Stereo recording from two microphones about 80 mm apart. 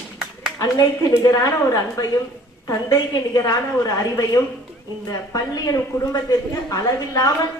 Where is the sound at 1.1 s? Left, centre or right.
Left.